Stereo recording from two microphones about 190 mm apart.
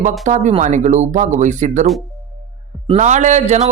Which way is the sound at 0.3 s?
40° right (ahead or behind).